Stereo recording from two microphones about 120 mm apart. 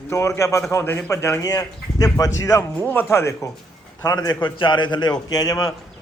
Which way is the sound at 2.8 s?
15° left (ahead or behind).